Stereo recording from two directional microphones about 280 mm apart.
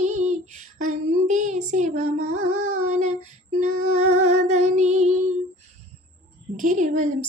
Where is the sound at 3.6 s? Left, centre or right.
Right.